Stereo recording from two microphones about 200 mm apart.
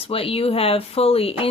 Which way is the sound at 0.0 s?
30° left (ahead or behind).